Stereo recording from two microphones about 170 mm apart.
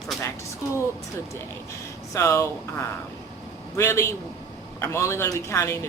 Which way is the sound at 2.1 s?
15° left (ahead or behind).